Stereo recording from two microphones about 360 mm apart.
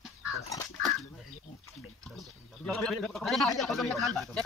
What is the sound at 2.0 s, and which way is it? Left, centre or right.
A man's voice, centre.